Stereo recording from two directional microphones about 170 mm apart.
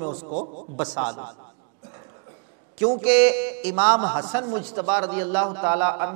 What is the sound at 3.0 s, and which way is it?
A man's voice, 10° right (ahead or behind).